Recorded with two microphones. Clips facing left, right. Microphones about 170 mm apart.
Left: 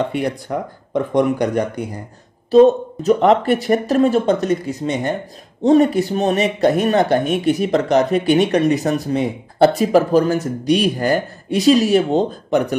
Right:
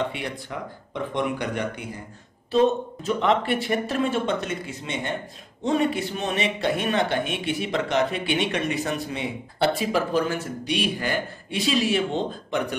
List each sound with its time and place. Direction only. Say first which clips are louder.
0.1 s speech: left 11 dB; 45° left (ahead or behind)